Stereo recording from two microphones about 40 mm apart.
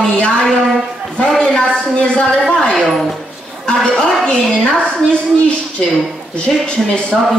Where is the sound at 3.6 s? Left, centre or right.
Left.